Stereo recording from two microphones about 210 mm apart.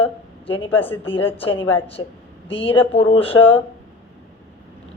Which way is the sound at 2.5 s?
25° left (ahead or behind).